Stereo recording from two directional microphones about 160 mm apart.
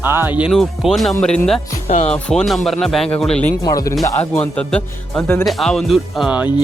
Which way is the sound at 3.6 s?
25° left (ahead or behind).